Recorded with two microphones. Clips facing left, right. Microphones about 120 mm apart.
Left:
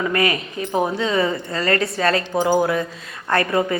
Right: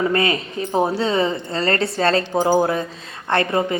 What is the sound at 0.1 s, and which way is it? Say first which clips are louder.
A woman's voice: right 1 dB; 30° right (ahead or behind).